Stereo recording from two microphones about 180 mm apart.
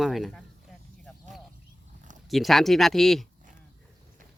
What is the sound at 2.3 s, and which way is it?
Speech, centre (ahead or behind).